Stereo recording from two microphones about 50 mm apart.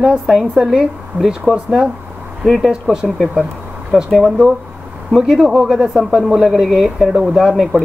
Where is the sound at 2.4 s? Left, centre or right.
Centre.